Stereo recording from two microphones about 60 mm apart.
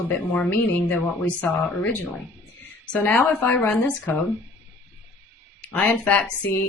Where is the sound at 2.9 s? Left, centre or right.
Left.